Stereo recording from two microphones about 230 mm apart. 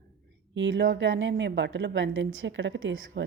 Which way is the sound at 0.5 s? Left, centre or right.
Right.